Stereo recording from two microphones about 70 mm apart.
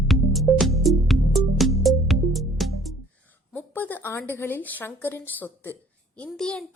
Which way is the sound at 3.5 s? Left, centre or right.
Left.